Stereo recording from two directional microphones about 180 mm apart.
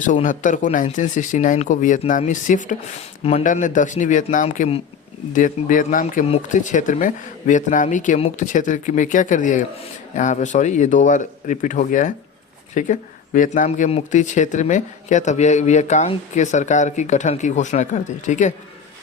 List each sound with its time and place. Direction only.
0.0 s speech: 45° left (ahead or behind)